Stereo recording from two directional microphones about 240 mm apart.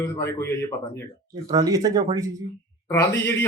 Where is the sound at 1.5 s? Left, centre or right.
Centre.